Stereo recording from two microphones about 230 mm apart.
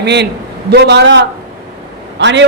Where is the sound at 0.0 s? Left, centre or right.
Right.